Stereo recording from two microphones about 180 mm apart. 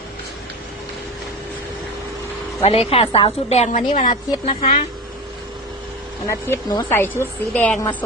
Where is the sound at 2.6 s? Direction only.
35° left (ahead or behind).